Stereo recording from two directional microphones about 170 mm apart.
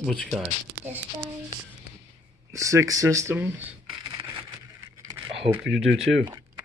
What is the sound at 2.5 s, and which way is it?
Speech, 20° right (ahead or behind).